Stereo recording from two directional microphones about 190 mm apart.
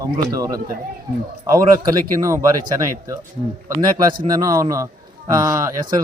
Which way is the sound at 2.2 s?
15° right (ahead or behind).